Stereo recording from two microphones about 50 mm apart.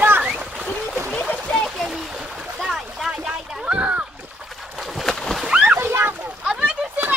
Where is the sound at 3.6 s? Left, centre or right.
Right.